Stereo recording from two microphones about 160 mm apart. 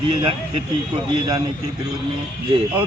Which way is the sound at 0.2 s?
35° right (ahead or behind).